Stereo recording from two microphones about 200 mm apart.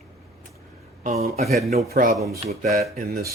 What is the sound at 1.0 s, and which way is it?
Speech, 35° right (ahead or behind).